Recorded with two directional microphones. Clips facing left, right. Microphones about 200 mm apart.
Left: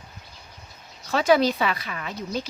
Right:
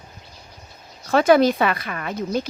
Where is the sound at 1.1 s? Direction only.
55° right (ahead or behind).